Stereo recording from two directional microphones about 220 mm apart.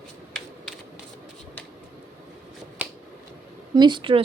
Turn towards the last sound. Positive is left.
turn(degrees=-20)  # may be behind; listen again after turning